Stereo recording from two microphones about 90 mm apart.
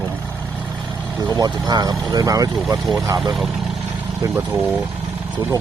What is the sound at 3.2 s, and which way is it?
Speech, centre (ahead or behind).